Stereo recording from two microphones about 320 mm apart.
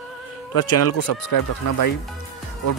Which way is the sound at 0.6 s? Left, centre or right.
Left.